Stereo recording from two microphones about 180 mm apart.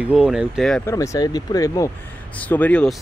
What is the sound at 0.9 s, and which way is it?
Speech, 15° left (ahead or behind).